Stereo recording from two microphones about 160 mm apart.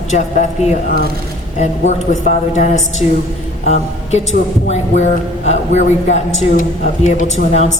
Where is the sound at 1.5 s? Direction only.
50° left (ahead or behind).